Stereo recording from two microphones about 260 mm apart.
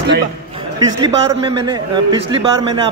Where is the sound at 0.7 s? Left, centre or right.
Centre.